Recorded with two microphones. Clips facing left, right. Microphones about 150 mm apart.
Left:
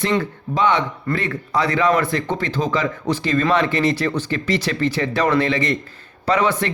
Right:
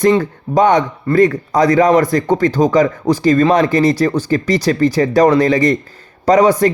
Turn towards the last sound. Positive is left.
turn(degrees=-40)  # may be behind; listen again after turning